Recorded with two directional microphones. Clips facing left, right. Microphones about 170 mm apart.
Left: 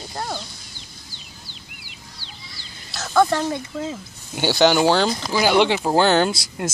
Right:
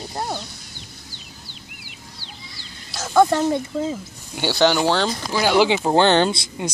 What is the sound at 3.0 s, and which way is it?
Speech, 15° right (ahead or behind).